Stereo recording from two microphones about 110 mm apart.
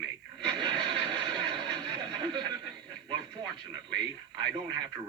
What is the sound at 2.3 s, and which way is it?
Speech, 40° right (ahead or behind).